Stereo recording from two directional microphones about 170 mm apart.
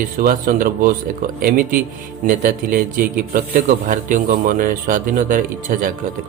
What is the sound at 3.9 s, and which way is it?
A man's voice, 50° right (ahead or behind).